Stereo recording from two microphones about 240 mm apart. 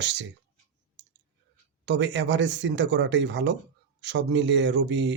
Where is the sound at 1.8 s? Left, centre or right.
Right.